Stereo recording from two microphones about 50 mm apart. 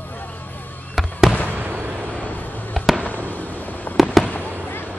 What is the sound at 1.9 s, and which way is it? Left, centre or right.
Vehicle, right.